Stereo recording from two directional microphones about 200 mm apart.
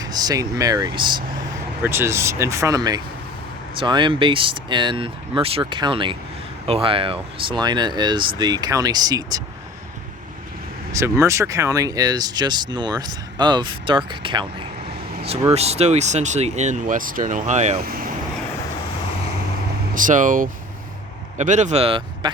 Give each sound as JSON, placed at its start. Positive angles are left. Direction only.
{"t": 0.0, "sound": "speech", "side_deg": -20}
{"t": 1.8, "sound": "speech", "side_deg": -10}
{"t": 10.9, "sound": "speech", "side_deg": -15}
{"t": 15.4, "sound": "speech", "side_deg": -30}
{"t": 19.9, "sound": "speech", "side_deg": -40}